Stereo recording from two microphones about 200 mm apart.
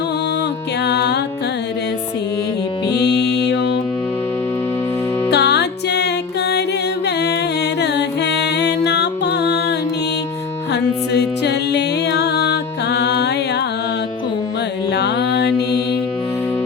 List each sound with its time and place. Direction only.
0.9 s music: 55° left (ahead or behind)
2.9 s music: 55° left (ahead or behind)
5.3 s music: 55° left (ahead or behind)
7.8 s music: 60° left (ahead or behind)
14.9 s music: 55° left (ahead or behind)